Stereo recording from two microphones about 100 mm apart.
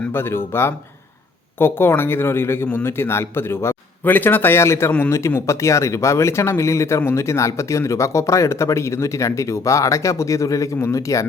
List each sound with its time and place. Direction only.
0.1 s speech: 25° left (ahead or behind)
4.9 s a man's voice: 15° left (ahead or behind)
5.1 s speech: 30° left (ahead or behind)